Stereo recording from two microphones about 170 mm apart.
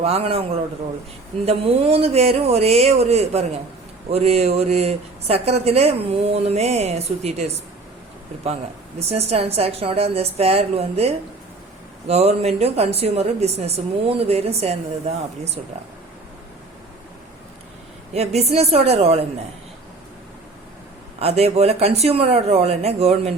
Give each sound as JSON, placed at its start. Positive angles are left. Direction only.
{"t": 0.0, "sound": "speech", "side_deg": -35}
{"t": 9.0, "sound": "speech", "side_deg": -35}
{"t": 18.1, "sound": "speech", "side_deg": -40}
{"t": 21.2, "sound": "speech", "side_deg": -35}